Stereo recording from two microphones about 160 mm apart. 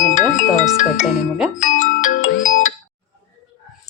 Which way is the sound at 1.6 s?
50° left (ahead or behind).